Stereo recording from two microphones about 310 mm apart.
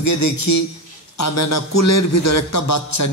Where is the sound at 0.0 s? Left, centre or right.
Left.